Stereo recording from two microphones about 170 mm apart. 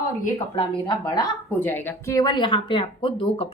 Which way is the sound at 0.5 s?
30° left (ahead or behind).